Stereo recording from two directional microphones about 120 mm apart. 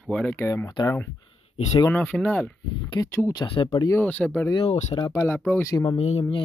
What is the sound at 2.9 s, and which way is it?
Speech, 20° left (ahead or behind).